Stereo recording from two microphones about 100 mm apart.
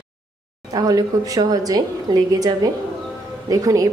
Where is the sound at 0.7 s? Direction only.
40° right (ahead or behind).